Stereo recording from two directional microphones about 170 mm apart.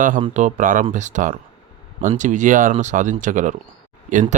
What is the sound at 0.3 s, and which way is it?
Speech, 45° right (ahead or behind).